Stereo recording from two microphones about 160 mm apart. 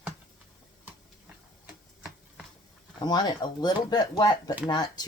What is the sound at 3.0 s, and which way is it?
Speech, 25° left (ahead or behind).